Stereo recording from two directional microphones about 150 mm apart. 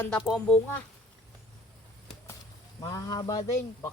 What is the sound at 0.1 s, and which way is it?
Speech, 5° left (ahead or behind).